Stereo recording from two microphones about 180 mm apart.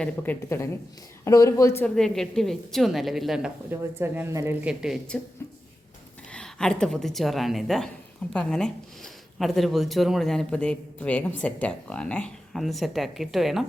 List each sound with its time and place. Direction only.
0.0 s speech: 10° left (ahead or behind)
2.0 s a man's voice: centre (ahead or behind)
6.3 s a man's voice: 5° left (ahead or behind)